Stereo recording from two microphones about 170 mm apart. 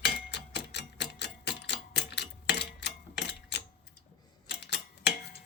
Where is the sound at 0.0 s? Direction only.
85° left.